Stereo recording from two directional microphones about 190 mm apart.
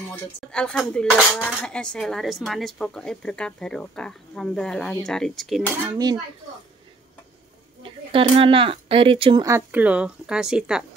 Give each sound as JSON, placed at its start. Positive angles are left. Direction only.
{"t": 0.1, "sound": "cutlery", "side_deg": 5}
{"t": 5.9, "sound": "speech", "side_deg": -20}
{"t": 7.8, "sound": "speech", "side_deg": -25}